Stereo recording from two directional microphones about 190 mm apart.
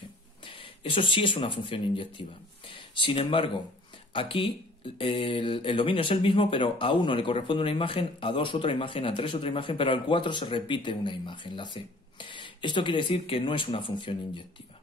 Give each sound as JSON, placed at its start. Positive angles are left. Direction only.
{"t": 0.5, "sound": "speech", "side_deg": 25}